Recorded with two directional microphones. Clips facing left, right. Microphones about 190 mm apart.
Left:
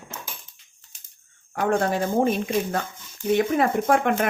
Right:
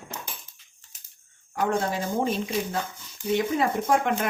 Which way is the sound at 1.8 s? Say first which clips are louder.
Left 5 dB; 60° left (ahead or behind).